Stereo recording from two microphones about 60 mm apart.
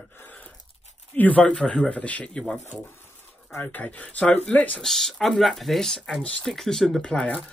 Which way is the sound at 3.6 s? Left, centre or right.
Left.